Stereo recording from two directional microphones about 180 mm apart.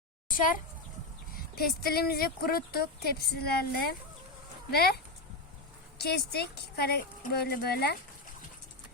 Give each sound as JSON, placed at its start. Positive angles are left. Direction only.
{"t": 1.5, "sound": "a woman's voice", "side_deg": 60}
{"t": 6.0, "sound": "a woman's voice", "side_deg": 65}